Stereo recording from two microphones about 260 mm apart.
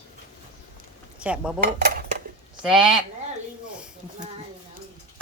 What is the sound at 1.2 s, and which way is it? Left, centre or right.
Dishes, centre.